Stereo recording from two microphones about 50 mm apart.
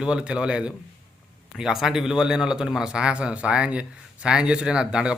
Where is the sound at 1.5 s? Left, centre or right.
Centre.